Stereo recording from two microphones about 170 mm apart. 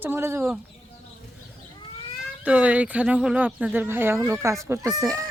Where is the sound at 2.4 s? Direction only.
10° right (ahead or behind).